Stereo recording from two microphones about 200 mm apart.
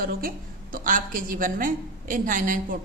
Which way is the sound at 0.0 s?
45° right (ahead or behind).